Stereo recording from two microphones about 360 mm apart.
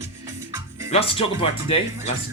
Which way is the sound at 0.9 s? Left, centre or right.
Centre.